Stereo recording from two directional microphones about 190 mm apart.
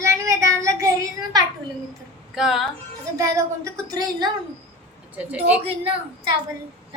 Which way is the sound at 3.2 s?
20° right (ahead or behind).